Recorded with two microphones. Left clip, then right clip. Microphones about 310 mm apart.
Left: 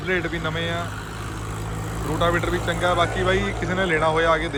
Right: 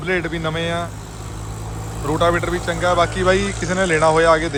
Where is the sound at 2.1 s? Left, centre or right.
Centre.